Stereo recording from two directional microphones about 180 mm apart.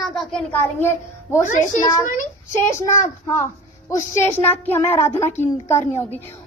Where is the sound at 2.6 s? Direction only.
15° left (ahead or behind).